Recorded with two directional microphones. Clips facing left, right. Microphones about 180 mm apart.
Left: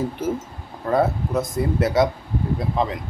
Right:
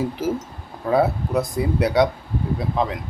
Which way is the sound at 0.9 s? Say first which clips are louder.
Right 1 dB; centre (ahead or behind).